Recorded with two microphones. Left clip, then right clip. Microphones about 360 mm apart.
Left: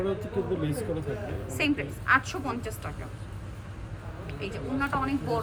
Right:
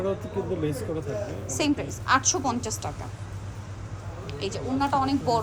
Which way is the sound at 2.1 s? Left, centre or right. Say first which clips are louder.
Right 2 dB; centre.